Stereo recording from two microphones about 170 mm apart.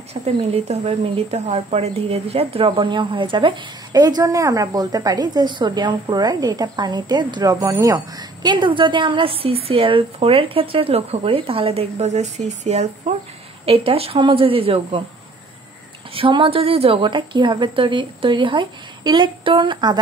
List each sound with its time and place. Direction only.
0.1 s a woman's voice: 40° right (ahead or behind)
16.1 s speech: 30° right (ahead or behind)